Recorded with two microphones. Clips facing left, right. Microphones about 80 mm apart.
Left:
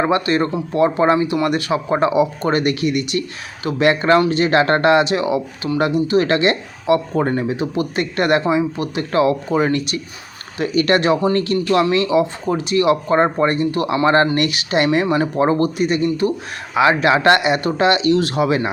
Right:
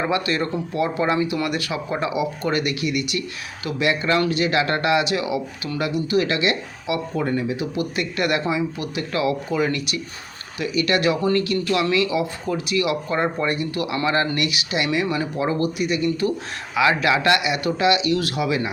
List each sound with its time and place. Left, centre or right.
0.0 s speech: left
16.0 s speech: left